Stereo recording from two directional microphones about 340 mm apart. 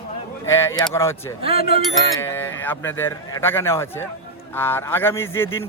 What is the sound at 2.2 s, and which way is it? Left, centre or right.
A man's voice, centre.